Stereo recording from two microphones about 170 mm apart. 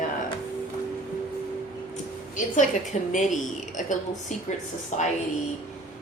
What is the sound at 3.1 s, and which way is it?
Speech, 45° left (ahead or behind).